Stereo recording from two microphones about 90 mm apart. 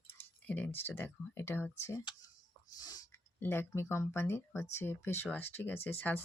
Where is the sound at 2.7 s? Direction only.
45° left (ahead or behind).